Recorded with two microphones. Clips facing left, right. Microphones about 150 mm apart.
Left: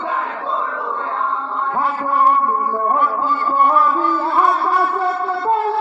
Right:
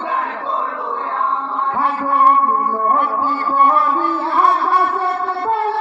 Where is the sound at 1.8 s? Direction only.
65° right (ahead or behind).